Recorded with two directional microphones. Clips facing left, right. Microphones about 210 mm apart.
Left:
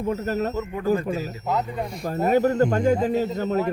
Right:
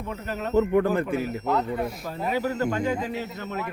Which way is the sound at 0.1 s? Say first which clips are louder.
Left 7 dB; 45° left (ahead or behind).